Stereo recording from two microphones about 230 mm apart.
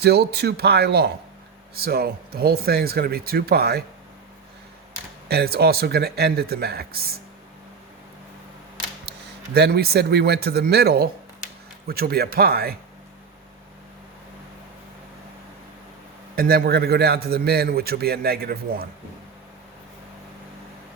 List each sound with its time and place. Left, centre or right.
0.0 s a man's voice: right
5.3 s a man's voice: right
9.6 s a man's voice: right
16.3 s a man's voice: right